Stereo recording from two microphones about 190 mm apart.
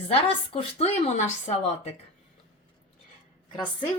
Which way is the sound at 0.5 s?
35° left (ahead or behind).